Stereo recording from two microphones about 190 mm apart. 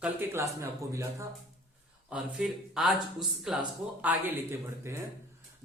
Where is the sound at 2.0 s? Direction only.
5° right (ahead or behind).